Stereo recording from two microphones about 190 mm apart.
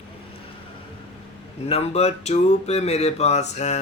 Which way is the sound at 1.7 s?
30° left (ahead or behind).